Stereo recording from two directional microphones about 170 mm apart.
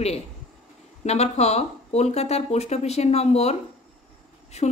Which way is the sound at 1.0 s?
40° left (ahead or behind).